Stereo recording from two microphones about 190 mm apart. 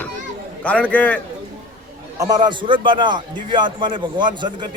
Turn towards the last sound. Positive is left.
turn(degrees=-25)  # may be behind; listen again after turning